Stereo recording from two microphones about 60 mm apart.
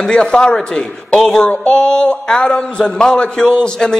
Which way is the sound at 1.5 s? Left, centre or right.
Centre.